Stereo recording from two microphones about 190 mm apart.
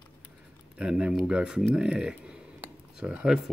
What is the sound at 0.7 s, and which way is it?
Speech, 5° right (ahead or behind).